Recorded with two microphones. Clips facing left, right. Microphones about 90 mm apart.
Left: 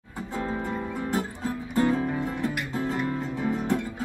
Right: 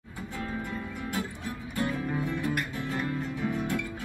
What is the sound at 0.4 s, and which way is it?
Music, 30° left (ahead or behind).